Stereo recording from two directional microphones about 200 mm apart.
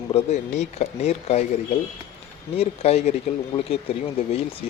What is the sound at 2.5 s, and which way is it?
Speech, 30° left (ahead or behind).